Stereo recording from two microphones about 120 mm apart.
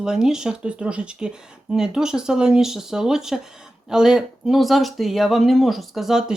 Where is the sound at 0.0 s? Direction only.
5° right (ahead or behind).